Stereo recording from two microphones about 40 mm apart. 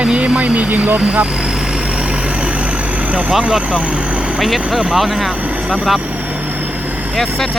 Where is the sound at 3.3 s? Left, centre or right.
Centre.